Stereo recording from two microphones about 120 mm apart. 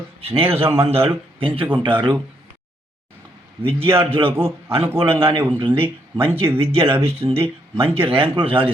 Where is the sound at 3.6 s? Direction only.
50° right (ahead or behind).